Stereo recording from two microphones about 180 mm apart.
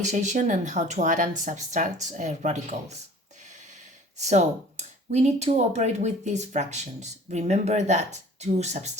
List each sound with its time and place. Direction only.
0.0 s speech: 40° right (ahead or behind)
4.2 s speech: 40° right (ahead or behind)